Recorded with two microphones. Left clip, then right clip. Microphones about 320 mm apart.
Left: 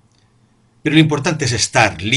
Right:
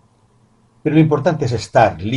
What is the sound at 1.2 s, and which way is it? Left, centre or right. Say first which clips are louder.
Speech: even; left.